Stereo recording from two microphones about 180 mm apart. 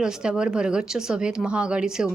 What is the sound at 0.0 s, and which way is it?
Speech, 5° right (ahead or behind).